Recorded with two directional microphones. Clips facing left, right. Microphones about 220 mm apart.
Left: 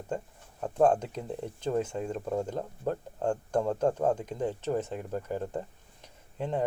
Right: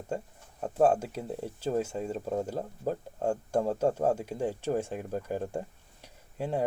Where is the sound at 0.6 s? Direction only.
5° right (ahead or behind).